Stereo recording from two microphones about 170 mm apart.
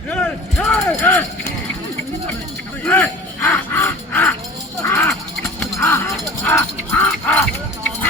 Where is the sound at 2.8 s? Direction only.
15° left (ahead or behind).